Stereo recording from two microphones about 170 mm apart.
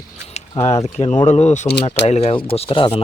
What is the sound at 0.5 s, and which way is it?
Speech, 20° left (ahead or behind).